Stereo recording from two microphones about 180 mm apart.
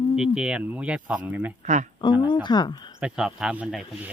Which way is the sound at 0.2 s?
5° right (ahead or behind).